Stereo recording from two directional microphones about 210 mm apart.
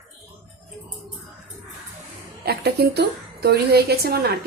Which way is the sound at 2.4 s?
50° right (ahead or behind).